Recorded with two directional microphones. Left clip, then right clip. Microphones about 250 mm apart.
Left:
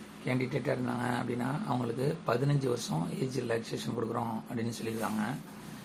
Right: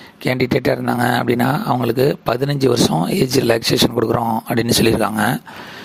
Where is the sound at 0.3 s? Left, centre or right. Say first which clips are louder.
Right 16 dB; right.